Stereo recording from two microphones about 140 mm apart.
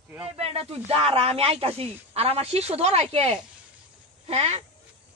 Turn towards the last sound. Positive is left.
turn(degrees=-50)  # may be behind; listen again after turning